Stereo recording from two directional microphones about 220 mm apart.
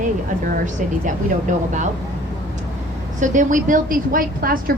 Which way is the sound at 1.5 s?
35° right (ahead or behind).